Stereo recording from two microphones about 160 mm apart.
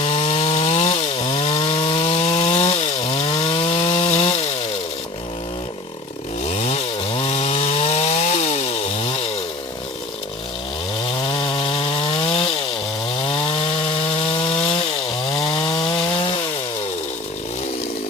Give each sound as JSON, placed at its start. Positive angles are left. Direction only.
{"t": 0.0, "sound": "chainsaw", "side_deg": 40}
{"t": 6.5, "sound": "chainsaw", "side_deg": 40}
{"t": 11.2, "sound": "chainsaw", "side_deg": 30}
{"t": 13.2, "sound": "wood", "side_deg": 35}
{"t": 15.3, "sound": "chainsaw", "side_deg": 40}